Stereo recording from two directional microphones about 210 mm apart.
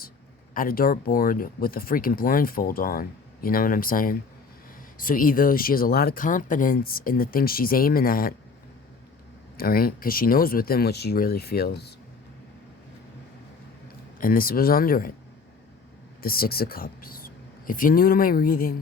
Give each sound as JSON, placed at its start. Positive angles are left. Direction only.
{"t": 0.5, "sound": "speech", "side_deg": 45}
{"t": 9.6, "sound": "speech", "side_deg": 45}
{"t": 14.2, "sound": "speech", "side_deg": 45}
{"t": 16.2, "sound": "speech", "side_deg": 45}